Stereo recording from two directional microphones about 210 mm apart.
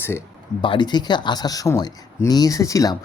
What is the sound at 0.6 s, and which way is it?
Speech, 20° left (ahead or behind).